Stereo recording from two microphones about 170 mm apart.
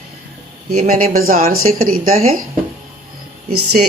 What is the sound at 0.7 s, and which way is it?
Speech, 60° right (ahead or behind).